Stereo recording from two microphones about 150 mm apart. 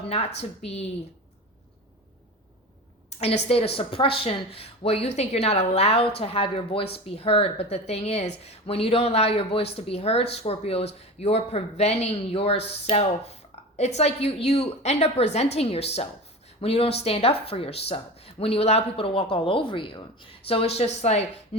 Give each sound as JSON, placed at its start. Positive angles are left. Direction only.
{"t": 0.1, "sound": "a woman's voice", "side_deg": 45}
{"t": 3.1, "sound": "a sound", "side_deg": 45}
{"t": 3.8, "sound": "a woman's voice", "side_deg": 35}